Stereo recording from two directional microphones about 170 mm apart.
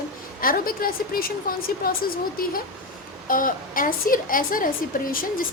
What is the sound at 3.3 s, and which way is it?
A woman's voice, 55° left (ahead or behind).